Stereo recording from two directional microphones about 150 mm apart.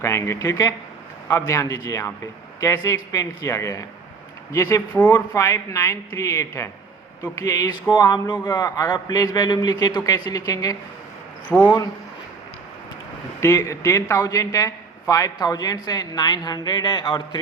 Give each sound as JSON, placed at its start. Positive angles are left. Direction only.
{"t": 0.0, "sound": "a man's voice", "side_deg": 20}
{"t": 11.5, "sound": "speech", "side_deg": 10}
{"t": 13.4, "sound": "a man's voice", "side_deg": 20}